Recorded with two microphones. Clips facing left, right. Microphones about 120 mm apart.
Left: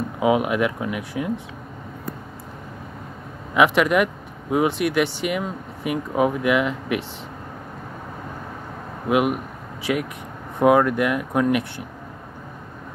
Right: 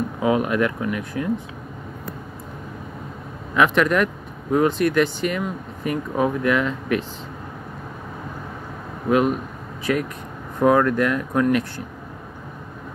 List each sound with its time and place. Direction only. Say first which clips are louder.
0.2 s speech: left 1 dB; 15° left (ahead or behind)
3.5 s speech: left 1 dB; 15° left (ahead or behind)
9.1 s speech: right 1 dB; 15° left (ahead or behind)